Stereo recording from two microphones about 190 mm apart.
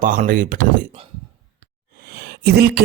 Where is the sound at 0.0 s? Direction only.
45° right (ahead or behind).